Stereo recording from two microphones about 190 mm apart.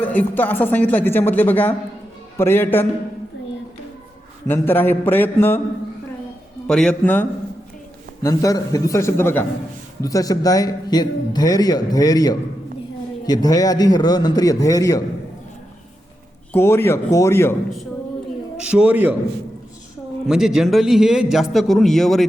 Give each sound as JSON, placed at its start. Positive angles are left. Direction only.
{"t": 0.0, "sound": "a woman's voice", "side_deg": 10}
{"t": 4.4, "sound": "a woman's voice", "side_deg": 10}
{"t": 6.7, "sound": "a woman's voice", "side_deg": 5}
{"t": 16.5, "sound": "a woman's voice", "side_deg": 10}
{"t": 18.5, "sound": "a man's voice", "side_deg": -5}
{"t": 20.2, "sound": "speech", "side_deg": 0}